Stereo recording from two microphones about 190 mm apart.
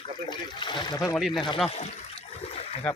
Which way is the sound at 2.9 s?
5° left (ahead or behind).